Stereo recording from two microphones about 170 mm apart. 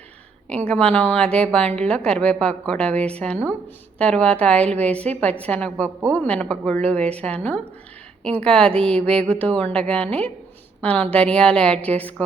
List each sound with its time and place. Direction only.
0.5 s a woman's voice: 5° left (ahead or behind)